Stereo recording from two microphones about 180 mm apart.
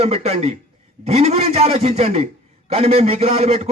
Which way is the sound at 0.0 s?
35° right (ahead or behind).